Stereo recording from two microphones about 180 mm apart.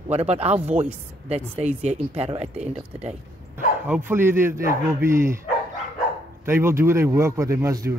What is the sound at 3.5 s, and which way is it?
A man's voice, 10° right (ahead or behind).